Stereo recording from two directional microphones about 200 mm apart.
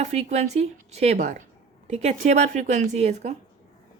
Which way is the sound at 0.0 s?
35° right (ahead or behind).